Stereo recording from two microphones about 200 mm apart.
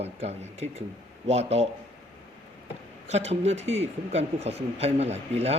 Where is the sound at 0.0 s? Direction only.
30° right (ahead or behind).